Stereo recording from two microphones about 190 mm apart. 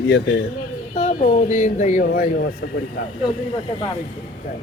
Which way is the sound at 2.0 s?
55° left (ahead or behind).